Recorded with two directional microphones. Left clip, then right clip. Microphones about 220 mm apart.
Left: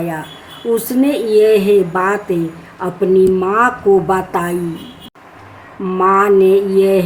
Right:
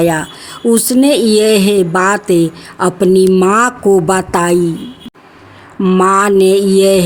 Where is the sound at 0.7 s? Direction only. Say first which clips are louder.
Right 4 dB; 55° right (ahead or behind).